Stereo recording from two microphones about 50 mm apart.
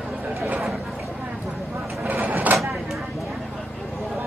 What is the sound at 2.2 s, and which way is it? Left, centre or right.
Vehicle, right.